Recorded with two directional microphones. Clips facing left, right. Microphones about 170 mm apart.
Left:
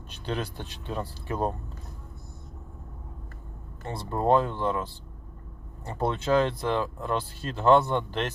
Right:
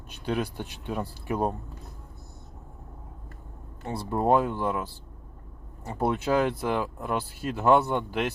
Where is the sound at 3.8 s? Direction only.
10° right (ahead or behind).